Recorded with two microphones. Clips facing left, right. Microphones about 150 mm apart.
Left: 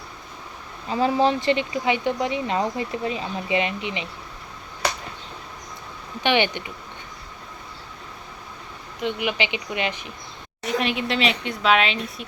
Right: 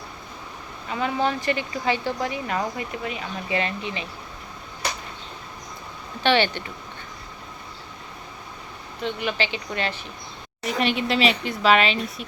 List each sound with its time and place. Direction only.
0.9 s speech: 30° left (ahead or behind)
6.2 s speech: 15° left (ahead or behind)
9.0 s speech: 15° left (ahead or behind)
10.6 s speech: centre (ahead or behind)